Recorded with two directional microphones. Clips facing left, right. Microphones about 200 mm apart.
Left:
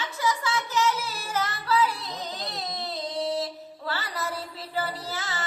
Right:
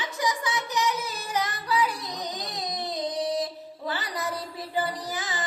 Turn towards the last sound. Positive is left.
turn(degrees=-15)  # may be behind; listen again after turning